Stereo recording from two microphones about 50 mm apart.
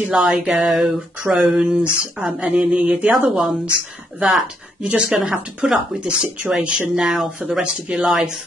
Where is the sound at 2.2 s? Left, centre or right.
Centre.